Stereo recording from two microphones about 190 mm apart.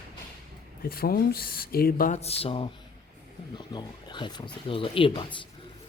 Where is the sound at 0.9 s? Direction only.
50° left (ahead or behind).